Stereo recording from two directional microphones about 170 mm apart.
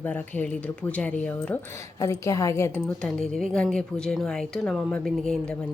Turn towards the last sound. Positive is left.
turn(degrees=5)  # may be behind; listen again after turning